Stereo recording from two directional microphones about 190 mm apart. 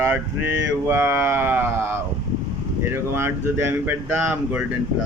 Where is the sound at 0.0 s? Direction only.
10° right (ahead or behind).